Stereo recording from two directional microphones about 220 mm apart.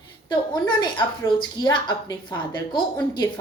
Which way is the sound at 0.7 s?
20° left (ahead or behind).